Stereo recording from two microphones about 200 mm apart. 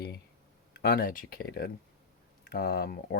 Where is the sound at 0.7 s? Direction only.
50° left (ahead or behind).